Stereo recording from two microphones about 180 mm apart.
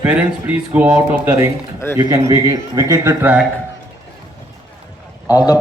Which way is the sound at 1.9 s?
20° right (ahead or behind).